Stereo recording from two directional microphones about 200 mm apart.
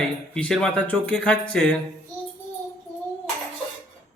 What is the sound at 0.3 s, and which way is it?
Speech, 5° left (ahead or behind).